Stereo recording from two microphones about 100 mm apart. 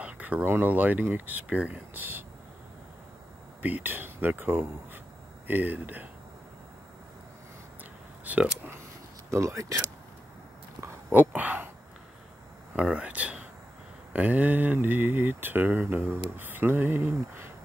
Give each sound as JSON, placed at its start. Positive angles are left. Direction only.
{"t": 0.0, "sound": "speech", "side_deg": -15}
{"t": 3.6, "sound": "mantra", "side_deg": -20}
{"t": 5.5, "sound": "speech", "side_deg": -20}
{"t": 8.3, "sound": "speech", "side_deg": -15}
{"t": 9.3, "sound": "speech", "side_deg": -30}
{"t": 11.1, "sound": "speech", "side_deg": -15}
{"t": 12.7, "sound": "speech", "side_deg": -10}
{"t": 14.1, "sound": "mantra", "side_deg": -15}